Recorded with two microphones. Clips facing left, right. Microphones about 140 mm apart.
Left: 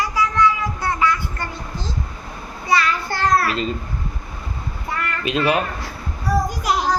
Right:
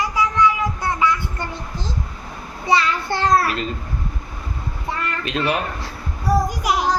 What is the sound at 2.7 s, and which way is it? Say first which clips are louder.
Child singing: right 1 dB; 25° right (ahead or behind).